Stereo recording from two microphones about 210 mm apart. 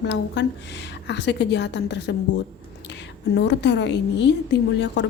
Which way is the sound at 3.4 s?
55° left (ahead or behind).